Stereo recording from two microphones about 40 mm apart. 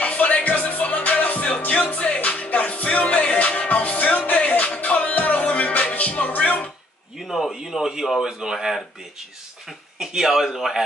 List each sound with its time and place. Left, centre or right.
0.0 s music: left
7.2 s a sound: centre
9.9 s speech: centre